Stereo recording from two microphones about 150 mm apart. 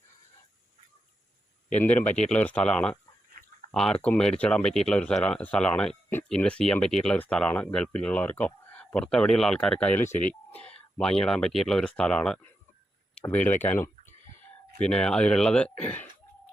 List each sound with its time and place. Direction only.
1.7 s speech: 10° left (ahead or behind)